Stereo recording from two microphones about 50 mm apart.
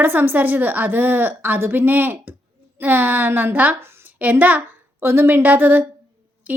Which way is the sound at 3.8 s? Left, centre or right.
Right.